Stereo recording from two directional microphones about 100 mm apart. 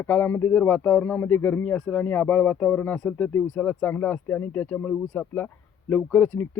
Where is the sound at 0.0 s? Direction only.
20° left (ahead or behind).